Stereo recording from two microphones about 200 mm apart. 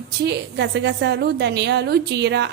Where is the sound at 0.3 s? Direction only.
60° right (ahead or behind).